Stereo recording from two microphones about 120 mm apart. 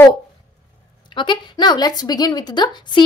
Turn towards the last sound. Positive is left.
turn(degrees=40)  # may be behind; listen again after turning